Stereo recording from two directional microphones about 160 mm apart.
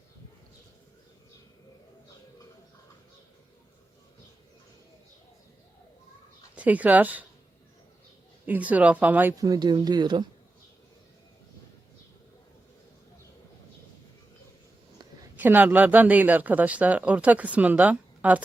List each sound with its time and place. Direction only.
6.6 s speech: 10° right (ahead or behind)
8.4 s speech: 10° right (ahead or behind)
9.4 s speech: 25° right (ahead or behind)
15.4 s speech: 10° right (ahead or behind)